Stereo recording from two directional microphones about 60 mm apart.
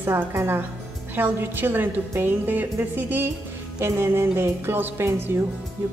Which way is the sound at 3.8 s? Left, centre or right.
Right.